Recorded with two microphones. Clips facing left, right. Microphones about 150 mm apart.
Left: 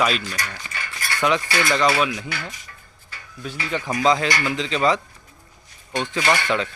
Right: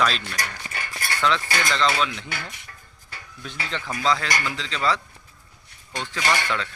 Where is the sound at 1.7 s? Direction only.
15° left (ahead or behind).